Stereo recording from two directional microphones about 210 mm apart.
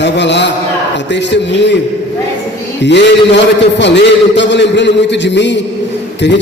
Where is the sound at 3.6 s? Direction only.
55° left (ahead or behind).